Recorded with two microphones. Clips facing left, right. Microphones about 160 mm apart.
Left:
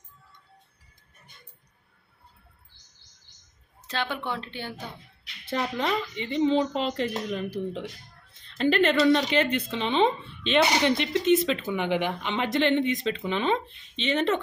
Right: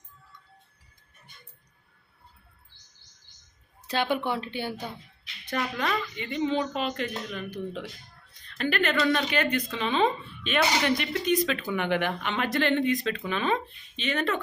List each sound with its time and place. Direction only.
3.8 s speech: 15° right (ahead or behind)
5.5 s a woman's voice: 25° left (ahead or behind)